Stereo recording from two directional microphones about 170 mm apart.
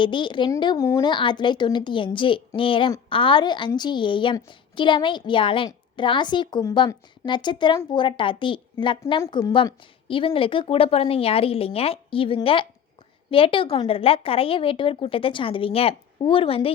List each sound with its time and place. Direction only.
0.0 s a woman's voice: 30° left (ahead or behind)